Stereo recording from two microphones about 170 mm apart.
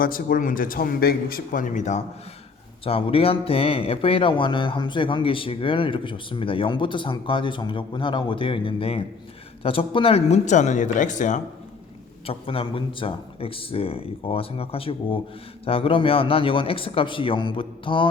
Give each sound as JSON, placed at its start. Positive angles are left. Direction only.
{"t": 0.0, "sound": "a man's voice", "side_deg": 55}
{"t": 12.2, "sound": "speech", "side_deg": 35}